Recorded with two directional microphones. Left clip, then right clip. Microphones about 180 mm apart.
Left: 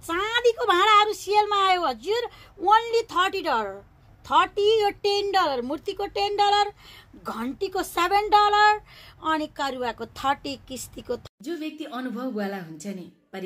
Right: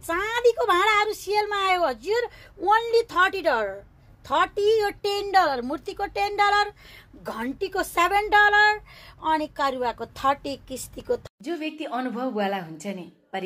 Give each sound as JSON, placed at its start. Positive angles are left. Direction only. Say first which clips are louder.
{"t": 0.0, "sound": "a woman's voice", "louder": "right 1 dB", "side_deg": 5}
{"t": 11.4, "sound": "speech", "louder": "right 2 dB", "side_deg": 20}